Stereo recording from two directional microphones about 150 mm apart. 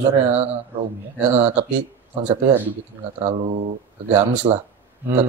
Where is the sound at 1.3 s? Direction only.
45° right (ahead or behind).